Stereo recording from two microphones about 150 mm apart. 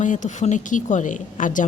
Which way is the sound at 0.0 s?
55° left (ahead or behind).